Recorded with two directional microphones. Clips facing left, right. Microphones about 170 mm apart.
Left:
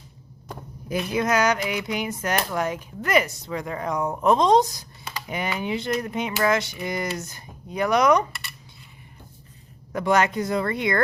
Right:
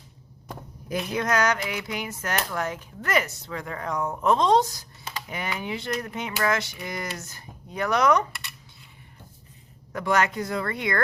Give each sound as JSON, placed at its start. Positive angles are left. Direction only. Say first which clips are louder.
{"t": 0.9, "sound": "speech", "louder": "left 3 dB", "side_deg": 0}
{"t": 9.9, "sound": "speech", "louder": "left 3 dB", "side_deg": 20}